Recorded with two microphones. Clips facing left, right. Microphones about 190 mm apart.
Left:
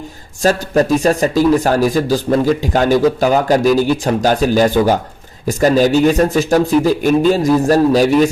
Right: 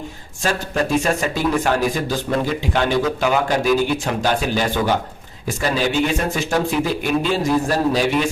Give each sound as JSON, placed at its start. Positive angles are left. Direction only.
{"t": 0.4, "sound": "speech", "side_deg": 40}